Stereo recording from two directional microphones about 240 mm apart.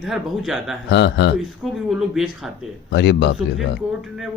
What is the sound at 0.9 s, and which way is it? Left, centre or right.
Speech, left.